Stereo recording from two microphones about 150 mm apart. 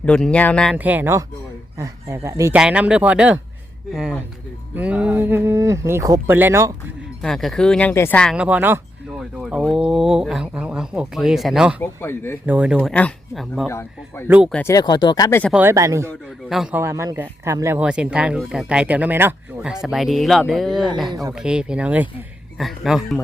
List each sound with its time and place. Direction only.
0.0 s speech: 5° left (ahead or behind)
0.8 s speech: 10° right (ahead or behind)
2.6 s speech: 5° right (ahead or behind)
7.2 s speech: 5° left (ahead or behind)
8.4 s speech: 10° right (ahead or behind)
11.8 s speech: 15° left (ahead or behind)
12.5 s speech: 10° right (ahead or behind)
12.9 s speech: 5° left (ahead or behind)
13.7 s speech: 15° left (ahead or behind)
14.3 s speech: 10° right (ahead or behind)
14.7 s speech: 25° left (ahead or behind)
15.7 s speech: 20° right (ahead or behind)
19.7 s speech: centre (ahead or behind)